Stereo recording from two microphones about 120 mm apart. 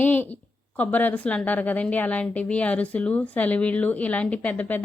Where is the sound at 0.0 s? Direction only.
15° left (ahead or behind).